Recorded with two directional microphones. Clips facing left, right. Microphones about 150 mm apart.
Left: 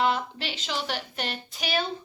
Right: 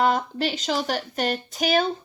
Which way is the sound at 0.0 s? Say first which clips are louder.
Right 4 dB; 45° right (ahead or behind).